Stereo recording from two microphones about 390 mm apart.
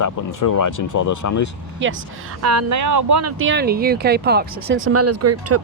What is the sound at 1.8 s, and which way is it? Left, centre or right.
Speech, right.